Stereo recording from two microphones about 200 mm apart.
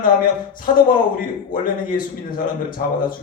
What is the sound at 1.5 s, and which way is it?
Speech, 45° left (ahead or behind).